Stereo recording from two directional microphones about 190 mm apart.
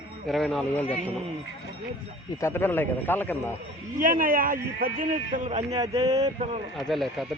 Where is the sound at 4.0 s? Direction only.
45° right (ahead or behind).